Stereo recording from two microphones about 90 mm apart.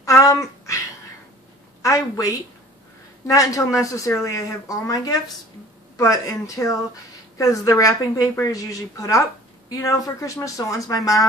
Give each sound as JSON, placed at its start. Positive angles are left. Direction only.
{"t": 0.0, "sound": "a sound", "side_deg": 40}
{"t": 1.8, "sound": "a woman's voice", "side_deg": 35}
{"t": 3.3, "sound": "a woman's voice", "side_deg": 40}